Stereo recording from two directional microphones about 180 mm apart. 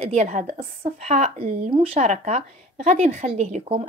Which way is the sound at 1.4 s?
55° right (ahead or behind).